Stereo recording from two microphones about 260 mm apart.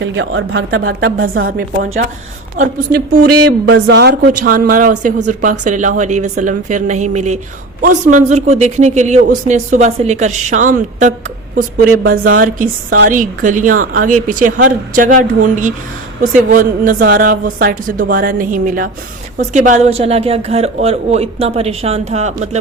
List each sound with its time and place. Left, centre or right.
0.0 s a woman's voice: right
3.2 s a sound: right
3.7 s a woman's voice: right